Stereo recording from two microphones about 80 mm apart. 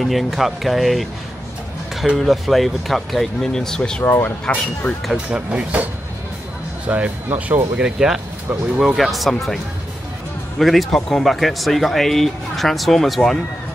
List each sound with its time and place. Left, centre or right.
0.0 s speech: centre
4.0 s speech: left
5.0 s speech: centre
6.9 s speech: centre
7.8 s speech: centre
10.6 s speech: centre